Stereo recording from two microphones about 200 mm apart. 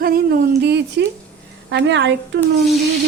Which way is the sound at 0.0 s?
50° right (ahead or behind).